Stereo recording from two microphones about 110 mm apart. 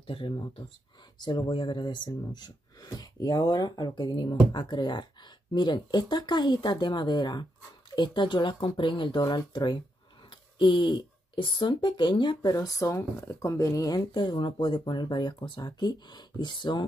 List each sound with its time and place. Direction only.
0.0 s speech: 50° left (ahead or behind)
12.4 s speech: 30° left (ahead or behind)